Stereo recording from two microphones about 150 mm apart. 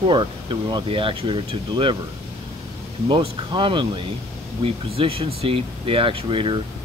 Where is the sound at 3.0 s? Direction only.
35° right (ahead or behind).